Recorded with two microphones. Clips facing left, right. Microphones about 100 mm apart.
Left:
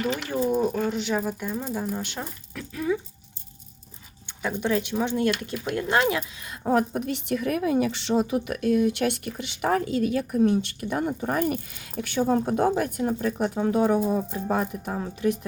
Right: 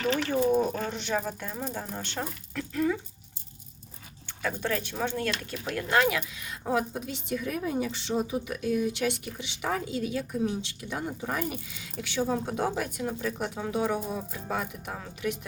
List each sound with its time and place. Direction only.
0.5 s speech: 5° left (ahead or behind)
4.3 s speech: 20° left (ahead or behind); by 15.4 s 35° left (ahead or behind)